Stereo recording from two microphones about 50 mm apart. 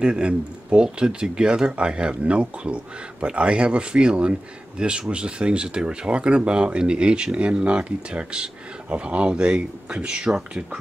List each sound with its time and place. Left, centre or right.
0.0 s speech: centre